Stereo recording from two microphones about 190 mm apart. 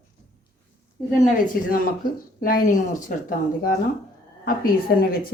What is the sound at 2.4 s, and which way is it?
Speech, 50° left (ahead or behind).